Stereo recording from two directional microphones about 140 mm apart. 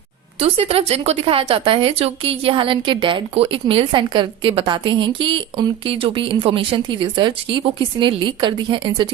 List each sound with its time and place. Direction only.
0.3 s speech: 45° right (ahead or behind)